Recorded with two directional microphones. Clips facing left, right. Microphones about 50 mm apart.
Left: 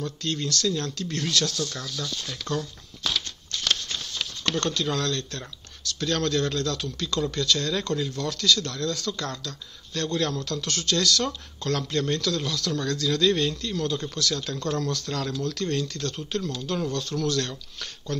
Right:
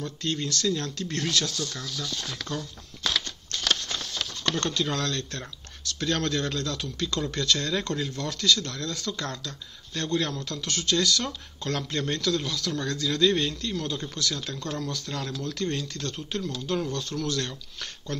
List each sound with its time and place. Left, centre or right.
0.0 s speech: right
4.1 s speech: right; by 15.4 s centre
15.4 s speech: right